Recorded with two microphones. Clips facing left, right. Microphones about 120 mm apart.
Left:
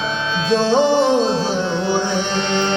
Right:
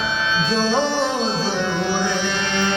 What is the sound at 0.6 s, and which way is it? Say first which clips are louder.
Music: left 7 dB; 20° left (ahead or behind).